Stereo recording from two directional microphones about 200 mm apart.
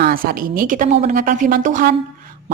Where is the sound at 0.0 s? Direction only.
45° right (ahead or behind).